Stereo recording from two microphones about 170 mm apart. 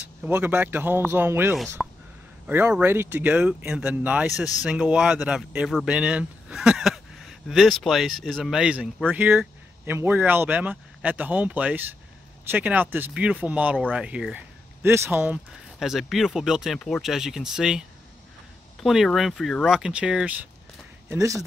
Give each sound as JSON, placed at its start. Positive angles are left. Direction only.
{"t": 0.2, "sound": "speech", "side_deg": -10}
{"t": 1.8, "sound": "a sound", "side_deg": 0}
{"t": 2.4, "sound": "speech", "side_deg": -10}
{"t": 21.1, "sound": "speech", "side_deg": -20}